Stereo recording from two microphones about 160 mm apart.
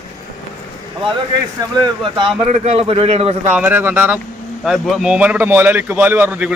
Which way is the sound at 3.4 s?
10° right (ahead or behind).